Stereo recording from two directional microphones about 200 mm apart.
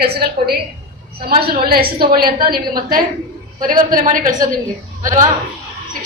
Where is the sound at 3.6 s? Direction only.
40° right (ahead or behind).